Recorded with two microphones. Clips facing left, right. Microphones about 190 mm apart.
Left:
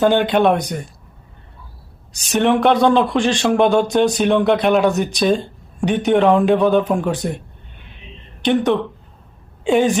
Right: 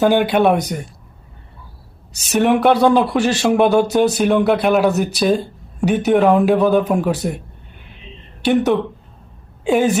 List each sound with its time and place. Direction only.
0.0 s speech: 5° right (ahead or behind)
2.3 s a man's voice: 5° right (ahead or behind)
8.4 s a man's voice: 5° right (ahead or behind)